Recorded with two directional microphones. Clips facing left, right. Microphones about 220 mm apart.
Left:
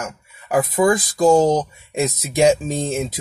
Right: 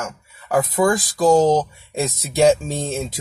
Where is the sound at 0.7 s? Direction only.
20° left (ahead or behind).